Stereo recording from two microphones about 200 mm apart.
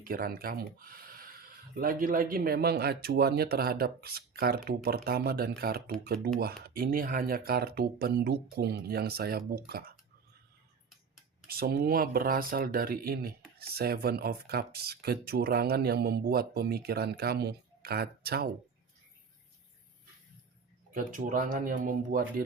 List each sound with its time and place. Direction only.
0.0 s speech: 45° right (ahead or behind)
11.4 s speech: 50° right (ahead or behind)
20.9 s speech: 40° right (ahead or behind)